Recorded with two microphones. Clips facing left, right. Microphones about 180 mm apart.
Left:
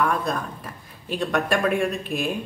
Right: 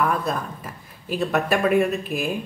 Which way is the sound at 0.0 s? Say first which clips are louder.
Even; 5° right (ahead or behind).